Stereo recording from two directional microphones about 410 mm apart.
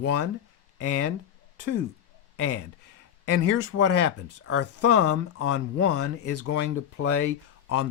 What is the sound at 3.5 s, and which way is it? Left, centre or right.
Speech, left.